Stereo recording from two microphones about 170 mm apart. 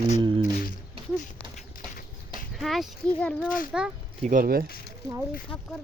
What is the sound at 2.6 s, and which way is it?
Speech, centre (ahead or behind).